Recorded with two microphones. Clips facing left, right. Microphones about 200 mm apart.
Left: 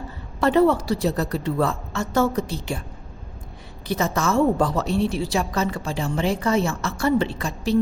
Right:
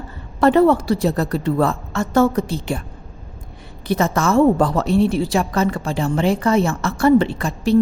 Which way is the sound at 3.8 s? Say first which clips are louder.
Right 4 dB; 55° right (ahead or behind).